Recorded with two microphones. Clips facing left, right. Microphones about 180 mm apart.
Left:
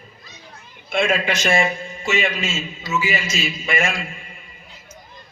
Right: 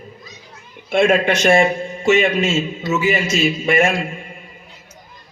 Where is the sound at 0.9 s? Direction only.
45° right (ahead or behind).